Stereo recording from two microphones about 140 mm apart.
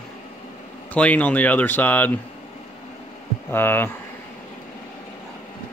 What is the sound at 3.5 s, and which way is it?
Speech, 15° left (ahead or behind).